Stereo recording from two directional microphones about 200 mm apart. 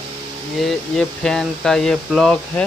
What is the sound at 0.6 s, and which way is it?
Speech, centre (ahead or behind).